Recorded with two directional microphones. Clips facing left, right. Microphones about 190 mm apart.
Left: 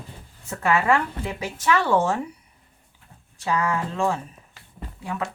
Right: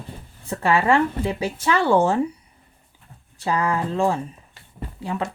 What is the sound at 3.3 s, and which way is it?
Speech, 35° right (ahead or behind).